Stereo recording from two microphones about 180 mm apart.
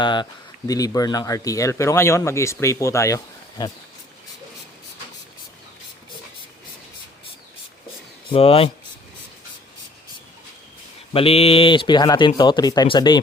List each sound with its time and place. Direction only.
0.0 s speech: 25° left (ahead or behind)
8.3 s speech: 35° left (ahead or behind)
11.1 s speech: 30° left (ahead or behind)